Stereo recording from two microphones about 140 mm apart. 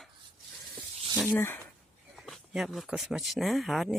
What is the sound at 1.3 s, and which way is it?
Speech, 15° left (ahead or behind).